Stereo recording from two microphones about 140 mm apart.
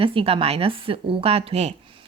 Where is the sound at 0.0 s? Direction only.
40° right (ahead or behind).